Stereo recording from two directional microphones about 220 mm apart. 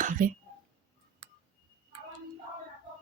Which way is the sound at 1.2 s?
40° right (ahead or behind).